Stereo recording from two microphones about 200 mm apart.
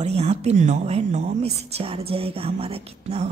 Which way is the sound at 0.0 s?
30° right (ahead or behind).